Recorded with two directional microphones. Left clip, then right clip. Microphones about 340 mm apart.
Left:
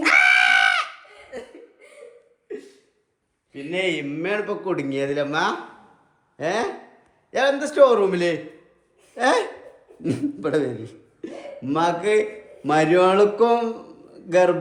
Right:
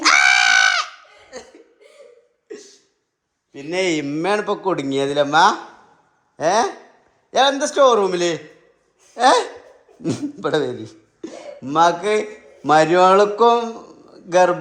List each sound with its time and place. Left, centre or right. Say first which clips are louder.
0.0 s a sound: right 2 dB; centre
1.3 s chuckle: left 1 dB; centre
3.7 s speech: right 3 dB; right
4.4 s a man's voice: right 4 dB; centre